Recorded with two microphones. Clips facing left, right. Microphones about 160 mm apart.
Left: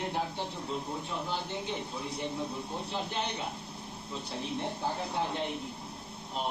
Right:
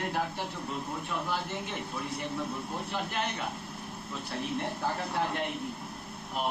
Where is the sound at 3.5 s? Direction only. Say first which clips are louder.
Right 2 dB; 55° right (ahead or behind).